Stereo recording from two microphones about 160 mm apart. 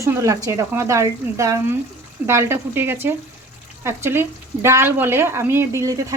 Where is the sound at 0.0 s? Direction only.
20° right (ahead or behind).